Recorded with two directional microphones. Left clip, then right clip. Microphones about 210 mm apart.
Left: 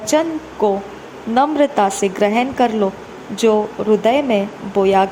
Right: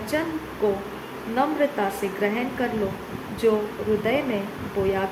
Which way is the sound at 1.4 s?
40° left (ahead or behind).